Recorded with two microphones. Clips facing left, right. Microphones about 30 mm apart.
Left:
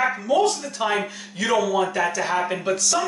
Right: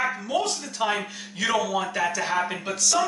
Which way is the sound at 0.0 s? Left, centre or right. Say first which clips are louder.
Left 4 dB; centre.